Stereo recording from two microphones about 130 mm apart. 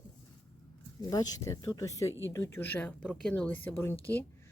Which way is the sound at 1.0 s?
30° left (ahead or behind).